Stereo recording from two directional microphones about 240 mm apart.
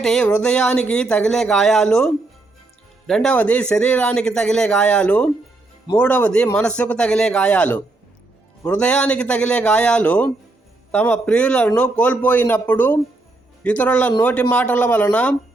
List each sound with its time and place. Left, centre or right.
0.0 s speech: centre